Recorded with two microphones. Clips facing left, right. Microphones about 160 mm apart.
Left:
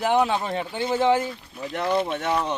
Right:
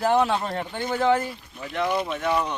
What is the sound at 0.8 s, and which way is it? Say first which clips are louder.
Speech: left 1 dB; 25° left (ahead or behind).